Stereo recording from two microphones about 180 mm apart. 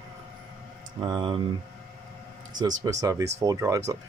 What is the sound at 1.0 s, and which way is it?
Speech, 25° right (ahead or behind).